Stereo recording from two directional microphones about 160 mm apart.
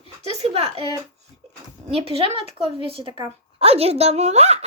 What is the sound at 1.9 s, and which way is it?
A child's voice, 40° right (ahead or behind).